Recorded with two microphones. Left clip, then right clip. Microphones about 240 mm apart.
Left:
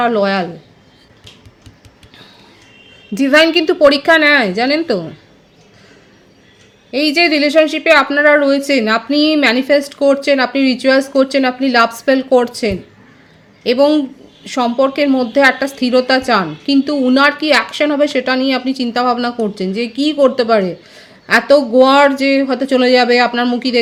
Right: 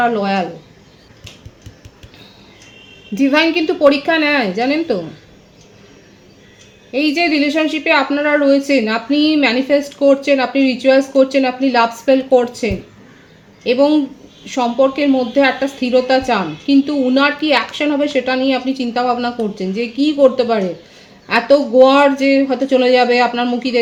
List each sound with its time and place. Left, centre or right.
0.0 s a woman's voice: left
3.2 s a woman's voice: left
6.9 s a woman's voice: left